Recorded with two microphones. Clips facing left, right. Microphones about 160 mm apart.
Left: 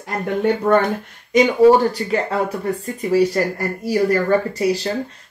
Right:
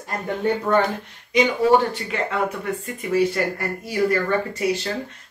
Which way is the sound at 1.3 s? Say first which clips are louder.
Left 5 dB; 45° left (ahead or behind).